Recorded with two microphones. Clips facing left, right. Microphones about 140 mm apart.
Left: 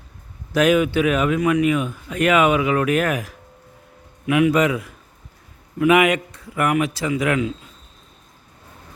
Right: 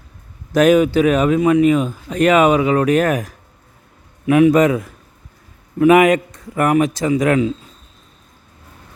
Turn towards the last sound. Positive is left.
turn(degrees=-35)  # may be behind; listen again after turning